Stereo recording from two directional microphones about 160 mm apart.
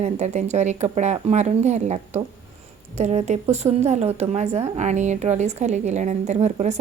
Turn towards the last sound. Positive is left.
turn(degrees=-45)  # may be behind; listen again after turning